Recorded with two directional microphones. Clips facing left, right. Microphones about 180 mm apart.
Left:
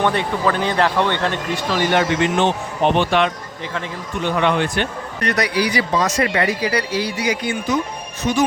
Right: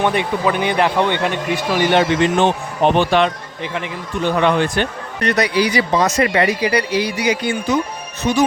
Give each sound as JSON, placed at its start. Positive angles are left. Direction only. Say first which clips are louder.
{"t": 0.0, "sound": "speech", "louder": "right 1 dB", "side_deg": -15}
{"t": 2.4, "sound": "speech", "louder": "right 2 dB", "side_deg": -40}
{"t": 4.4, "sound": "speech", "louder": "right 2 dB", "side_deg": -40}
{"t": 5.4, "sound": "speech", "louder": "right 3 dB", "side_deg": -25}
{"t": 7.3, "sound": "speech", "louder": "right 3 dB", "side_deg": -30}